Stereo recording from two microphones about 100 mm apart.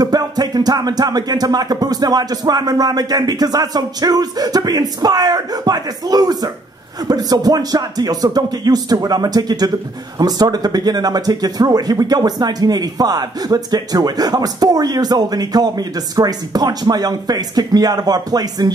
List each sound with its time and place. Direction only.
0.0 s music: 40° right (ahead or behind)